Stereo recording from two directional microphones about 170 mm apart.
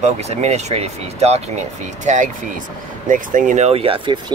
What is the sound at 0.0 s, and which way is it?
Speech, 40° right (ahead or behind).